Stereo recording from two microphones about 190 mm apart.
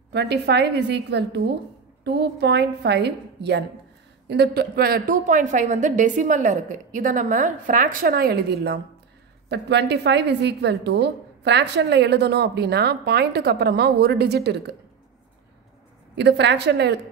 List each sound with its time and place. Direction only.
0.1 s a woman's voice: 60° right (ahead or behind)
16.2 s a woman's voice: 65° right (ahead or behind)